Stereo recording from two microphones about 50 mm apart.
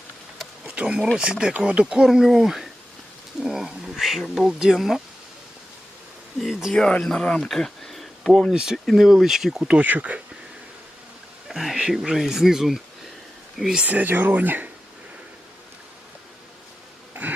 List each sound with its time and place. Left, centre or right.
1.1 s speech: centre
6.4 s speech: centre
6.7 s speech: centre
7.4 s speech: centre
8.5 s speech: centre
9.6 s speech: right
9.8 s speech: right
11.4 s speech: centre
13.8 s speech: right